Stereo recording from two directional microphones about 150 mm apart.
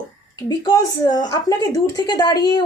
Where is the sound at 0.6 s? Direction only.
25° left (ahead or behind).